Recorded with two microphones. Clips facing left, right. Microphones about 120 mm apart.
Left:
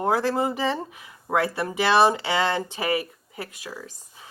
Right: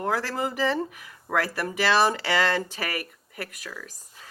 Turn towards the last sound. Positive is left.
turn(degrees=25)  # may be behind; listen again after turning